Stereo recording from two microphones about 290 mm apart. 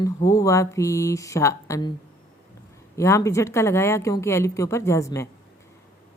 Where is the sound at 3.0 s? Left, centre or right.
Centre.